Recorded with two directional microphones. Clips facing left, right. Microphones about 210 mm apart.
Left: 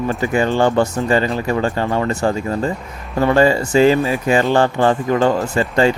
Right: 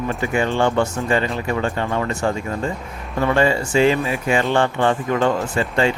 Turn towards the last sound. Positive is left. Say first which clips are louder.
# left 4 dB
turn(degrees=40)  # may be behind; listen again after turning